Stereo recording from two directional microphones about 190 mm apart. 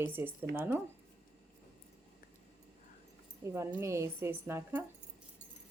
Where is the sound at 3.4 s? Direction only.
15° right (ahead or behind).